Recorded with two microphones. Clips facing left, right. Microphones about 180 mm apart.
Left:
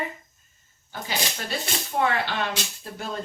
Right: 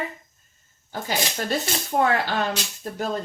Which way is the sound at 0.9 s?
45° right (ahead or behind).